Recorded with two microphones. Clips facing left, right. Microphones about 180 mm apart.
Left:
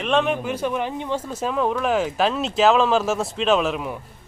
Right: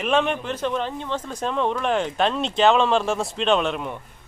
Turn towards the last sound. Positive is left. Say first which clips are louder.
# left 1 dB
turn(degrees=5)  # may be behind; listen again after turning